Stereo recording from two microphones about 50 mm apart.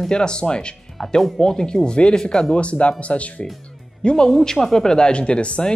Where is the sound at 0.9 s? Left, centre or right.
Centre.